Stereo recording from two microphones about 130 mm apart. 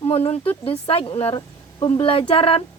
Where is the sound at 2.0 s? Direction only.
45° left (ahead or behind).